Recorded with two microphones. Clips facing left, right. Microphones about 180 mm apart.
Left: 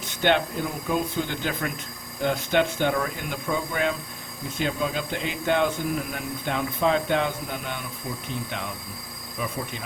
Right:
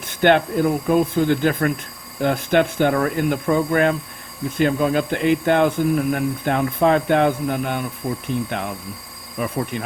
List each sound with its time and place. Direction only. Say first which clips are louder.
0.1 s speech: right 7 dB; 55° right (ahead or behind)